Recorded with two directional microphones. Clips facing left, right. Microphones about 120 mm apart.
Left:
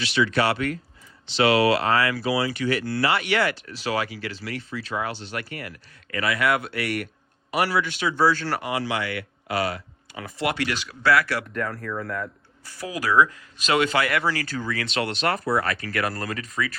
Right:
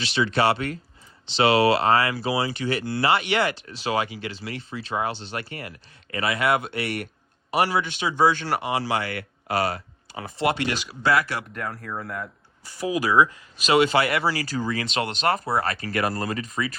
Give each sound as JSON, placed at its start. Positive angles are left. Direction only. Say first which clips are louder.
{"t": 0.0, "sound": "speech", "louder": "even", "side_deg": -25}
{"t": 14.3, "sound": "speech", "louder": "right 1 dB", "side_deg": -10}